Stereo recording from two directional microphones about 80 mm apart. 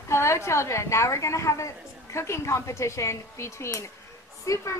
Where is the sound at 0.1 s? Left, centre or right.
Left.